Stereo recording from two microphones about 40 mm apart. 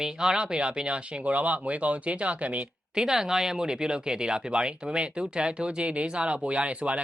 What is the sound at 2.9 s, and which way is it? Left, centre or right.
Speech, centre.